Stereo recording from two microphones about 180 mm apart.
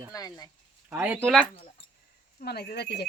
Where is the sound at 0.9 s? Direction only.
10° right (ahead or behind).